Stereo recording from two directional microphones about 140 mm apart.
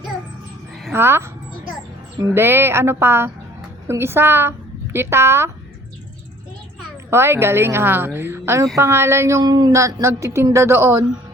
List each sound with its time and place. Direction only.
0.9 s a woman's voice: 15° right (ahead or behind)
7.1 s a woman's voice: 15° right (ahead or behind)